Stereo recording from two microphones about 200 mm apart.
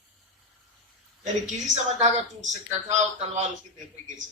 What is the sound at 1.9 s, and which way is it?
A man's voice, 35° right (ahead or behind).